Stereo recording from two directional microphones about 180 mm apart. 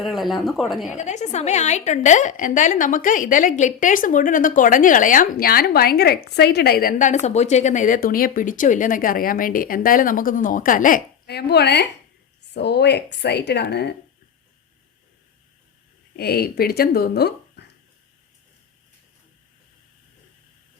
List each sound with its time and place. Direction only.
0.0 s speech: centre (ahead or behind)
0.9 s a woman's voice: 40° left (ahead or behind); by 13.9 s 65° left (ahead or behind)
16.1 s speech: 60° left (ahead or behind)
17.6 s a sound: 70° left (ahead or behind)